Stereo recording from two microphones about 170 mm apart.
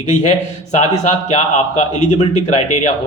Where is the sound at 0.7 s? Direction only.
45° left (ahead or behind).